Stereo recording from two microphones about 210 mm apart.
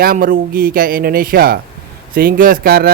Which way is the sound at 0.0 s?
45° right (ahead or behind).